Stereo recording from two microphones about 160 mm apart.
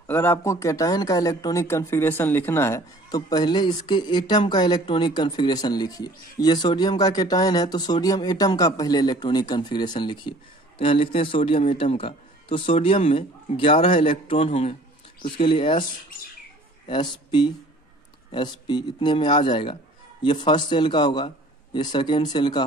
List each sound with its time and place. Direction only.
0.0 s speech: 15° left (ahead or behind); by 15.8 s 30° left (ahead or behind)
16.8 s speech: 30° left (ahead or behind)